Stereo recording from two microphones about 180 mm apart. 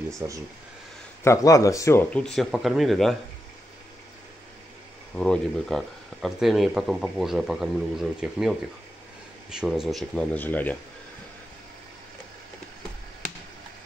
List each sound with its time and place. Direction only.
0.2 s speech: 15° right (ahead or behind)
1.2 s speech: 20° left (ahead or behind); by 3.2 s centre (ahead or behind)
5.1 s speech: 5° left (ahead or behind)